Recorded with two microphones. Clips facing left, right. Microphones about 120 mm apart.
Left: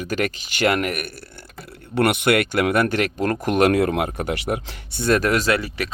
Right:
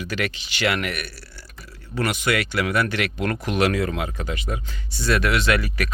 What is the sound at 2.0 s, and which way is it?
Speech, 60° left (ahead or behind).